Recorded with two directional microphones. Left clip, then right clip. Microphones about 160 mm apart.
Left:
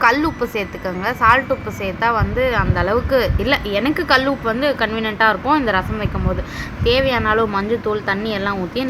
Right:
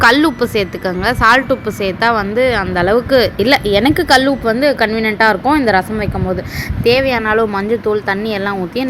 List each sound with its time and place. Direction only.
0.0 s speech: 30° right (ahead or behind)